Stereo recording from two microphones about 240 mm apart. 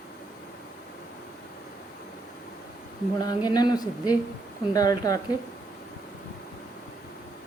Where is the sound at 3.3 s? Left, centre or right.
Centre.